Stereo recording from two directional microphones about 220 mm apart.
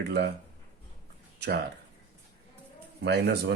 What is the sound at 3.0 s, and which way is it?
Speech, 50° right (ahead or behind).